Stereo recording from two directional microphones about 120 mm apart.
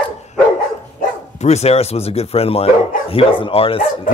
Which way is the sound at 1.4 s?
65° left (ahead or behind).